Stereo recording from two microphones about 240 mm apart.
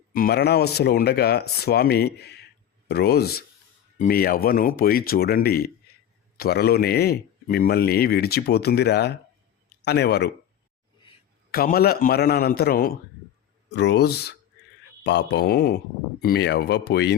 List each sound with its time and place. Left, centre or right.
0.1 s speech: left
11.5 s speech: left